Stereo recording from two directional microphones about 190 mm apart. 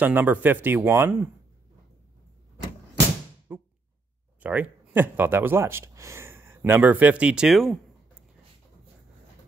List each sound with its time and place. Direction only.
0.0 s speech: 10° right (ahead or behind)
3.5 s a sound: 10° right (ahead or behind)
4.4 s speech: 10° right (ahead or behind)